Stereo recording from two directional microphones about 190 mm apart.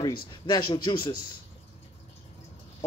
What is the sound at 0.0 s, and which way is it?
Speech, 20° left (ahead or behind).